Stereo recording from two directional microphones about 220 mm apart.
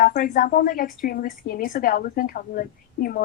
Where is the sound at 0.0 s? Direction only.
40° left (ahead or behind).